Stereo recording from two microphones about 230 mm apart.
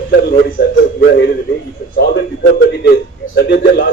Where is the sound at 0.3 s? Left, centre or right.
Left.